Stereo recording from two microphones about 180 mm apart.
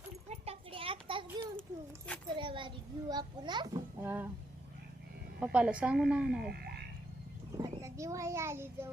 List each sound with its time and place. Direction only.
0.3 s a sound: 35° right (ahead or behind)
2.3 s a child's voice: 25° right (ahead or behind)
4.0 s a sound: 10° right (ahead or behind)
5.4 s a woman's voice: 5° right (ahead or behind)
6.5 s frog: 65° right (ahead or behind)
7.5 s a child's voice: 15° right (ahead or behind)